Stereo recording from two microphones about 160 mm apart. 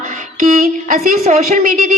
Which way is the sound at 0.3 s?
55° right (ahead or behind).